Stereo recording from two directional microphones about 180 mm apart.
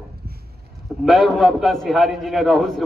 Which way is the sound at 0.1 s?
60° right (ahead or behind).